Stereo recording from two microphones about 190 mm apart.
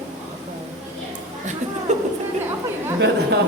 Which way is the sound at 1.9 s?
40° right (ahead or behind).